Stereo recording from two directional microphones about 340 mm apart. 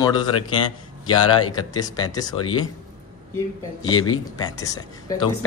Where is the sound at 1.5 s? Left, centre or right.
Centre.